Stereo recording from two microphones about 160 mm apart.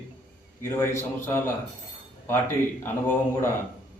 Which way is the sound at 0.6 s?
15° left (ahead or behind).